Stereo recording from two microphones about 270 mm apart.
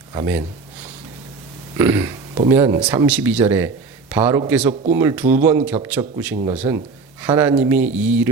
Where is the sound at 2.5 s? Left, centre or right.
Centre.